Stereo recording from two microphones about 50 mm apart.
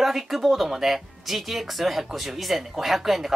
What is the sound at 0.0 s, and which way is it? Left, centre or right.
Speech, centre.